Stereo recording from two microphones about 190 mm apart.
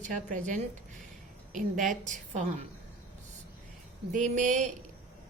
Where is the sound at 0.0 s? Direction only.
40° right (ahead or behind).